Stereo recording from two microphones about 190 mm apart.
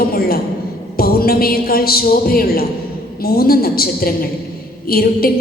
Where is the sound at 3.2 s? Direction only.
50° left (ahead or behind).